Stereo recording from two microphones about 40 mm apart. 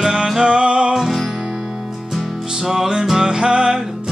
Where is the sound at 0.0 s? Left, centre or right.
Centre.